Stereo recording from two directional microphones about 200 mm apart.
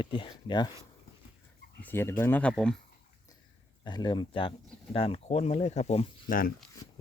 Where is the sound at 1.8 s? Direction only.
10° left (ahead or behind).